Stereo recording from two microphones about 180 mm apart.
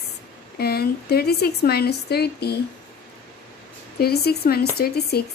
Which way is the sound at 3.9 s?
60° left (ahead or behind).